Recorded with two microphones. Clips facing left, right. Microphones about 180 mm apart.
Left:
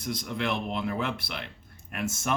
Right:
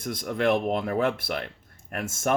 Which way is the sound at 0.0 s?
50° right (ahead or behind).